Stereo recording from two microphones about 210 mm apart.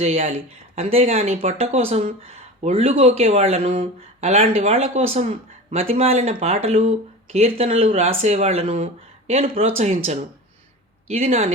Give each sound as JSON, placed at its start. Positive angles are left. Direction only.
{"t": 0.0, "sound": "speech", "side_deg": -30}
{"t": 11.1, "sound": "speech", "side_deg": -30}